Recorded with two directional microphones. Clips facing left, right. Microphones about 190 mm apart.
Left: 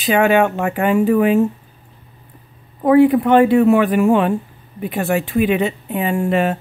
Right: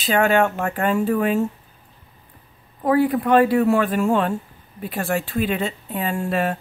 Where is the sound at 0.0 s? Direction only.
15° left (ahead or behind).